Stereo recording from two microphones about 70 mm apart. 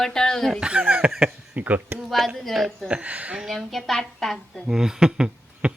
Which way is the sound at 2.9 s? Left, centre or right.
Centre.